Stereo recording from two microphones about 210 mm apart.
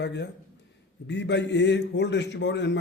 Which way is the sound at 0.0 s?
55° left (ahead or behind).